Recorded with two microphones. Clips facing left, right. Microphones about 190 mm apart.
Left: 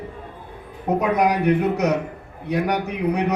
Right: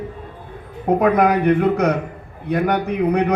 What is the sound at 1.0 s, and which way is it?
A man's voice, 55° right (ahead or behind).